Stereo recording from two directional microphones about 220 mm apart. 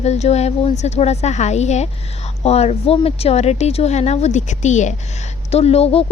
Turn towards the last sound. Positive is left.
turn(degrees=25)  # may be behind; listen again after turning